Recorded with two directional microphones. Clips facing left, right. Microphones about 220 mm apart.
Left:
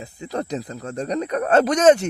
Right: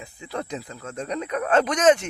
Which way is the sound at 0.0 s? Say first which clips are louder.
Left 5 dB; 40° left (ahead or behind).